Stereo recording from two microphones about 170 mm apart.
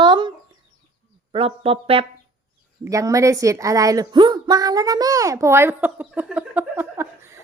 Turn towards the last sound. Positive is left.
turn(degrees=-15)  # may be behind; listen again after turning